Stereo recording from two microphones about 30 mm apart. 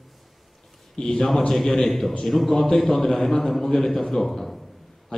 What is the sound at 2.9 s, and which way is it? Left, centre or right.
A man's voice, centre.